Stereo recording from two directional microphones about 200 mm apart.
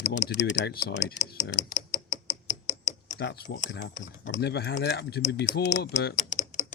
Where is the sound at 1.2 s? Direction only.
35° left (ahead or behind).